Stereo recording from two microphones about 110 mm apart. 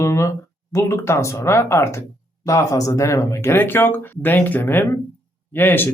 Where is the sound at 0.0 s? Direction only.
25° left (ahead or behind).